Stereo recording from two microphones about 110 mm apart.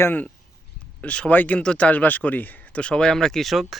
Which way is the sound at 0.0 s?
15° left (ahead or behind).